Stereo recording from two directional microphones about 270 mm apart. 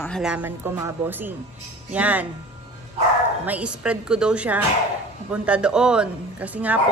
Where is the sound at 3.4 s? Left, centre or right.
Centre.